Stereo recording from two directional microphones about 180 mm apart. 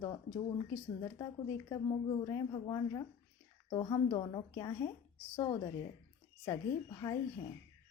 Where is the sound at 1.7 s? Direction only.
20° left (ahead or behind).